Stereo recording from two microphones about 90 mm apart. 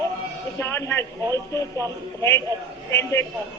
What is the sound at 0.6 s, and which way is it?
Speech, 30° left (ahead or behind).